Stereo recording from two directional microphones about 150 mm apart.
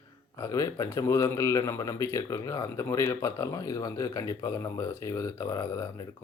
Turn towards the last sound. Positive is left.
turn(degrees=20)  # may be behind; listen again after turning